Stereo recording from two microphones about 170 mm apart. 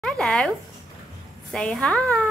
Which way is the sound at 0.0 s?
5° left (ahead or behind).